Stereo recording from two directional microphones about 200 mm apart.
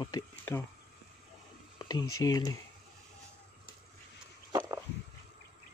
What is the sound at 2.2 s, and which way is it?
Speech, 20° left (ahead or behind).